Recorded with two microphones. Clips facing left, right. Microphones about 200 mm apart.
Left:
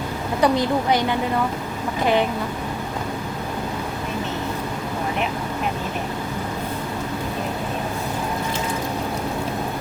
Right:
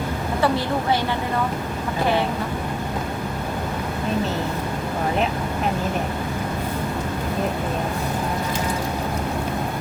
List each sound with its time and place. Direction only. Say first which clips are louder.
0.4 s a woman's voice: left 3 dB; 15° left (ahead or behind)